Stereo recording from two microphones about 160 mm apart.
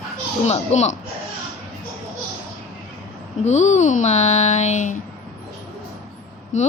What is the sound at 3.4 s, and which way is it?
Speech, 45° left (ahead or behind).